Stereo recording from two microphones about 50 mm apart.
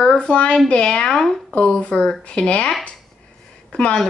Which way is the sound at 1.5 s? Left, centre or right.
Left.